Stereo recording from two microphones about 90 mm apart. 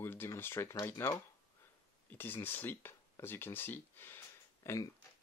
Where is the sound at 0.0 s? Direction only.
25° left (ahead or behind).